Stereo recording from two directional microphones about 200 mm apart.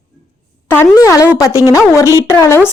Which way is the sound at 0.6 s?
10° left (ahead or behind).